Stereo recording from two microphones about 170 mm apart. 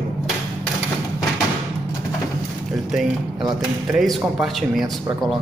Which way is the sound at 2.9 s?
Centre (ahead or behind).